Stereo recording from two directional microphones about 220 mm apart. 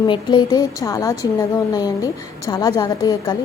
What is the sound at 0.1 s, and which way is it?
A woman's voice, 20° left (ahead or behind).